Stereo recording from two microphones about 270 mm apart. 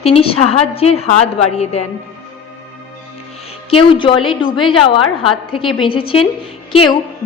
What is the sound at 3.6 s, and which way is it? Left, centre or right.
A woman's voice, centre.